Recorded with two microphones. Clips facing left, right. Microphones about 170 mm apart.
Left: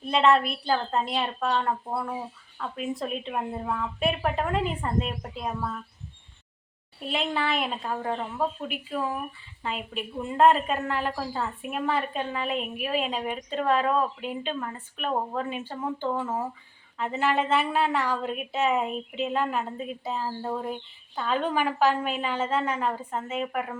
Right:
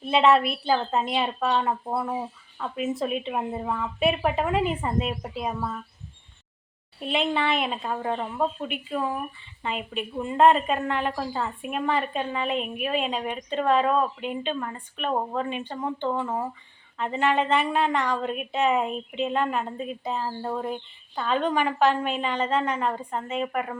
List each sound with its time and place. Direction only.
0.0 s a woman's voice: 5° right (ahead or behind)
2.7 s a woman's voice: 5° right (ahead or behind)
7.0 s a woman's voice: centre (ahead or behind)